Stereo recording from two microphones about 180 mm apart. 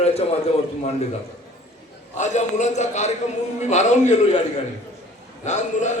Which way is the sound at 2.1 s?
40° left (ahead or behind).